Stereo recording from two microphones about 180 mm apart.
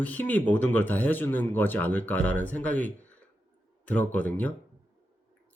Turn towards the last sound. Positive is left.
turn(degrees=10)  # may be behind; listen again after turning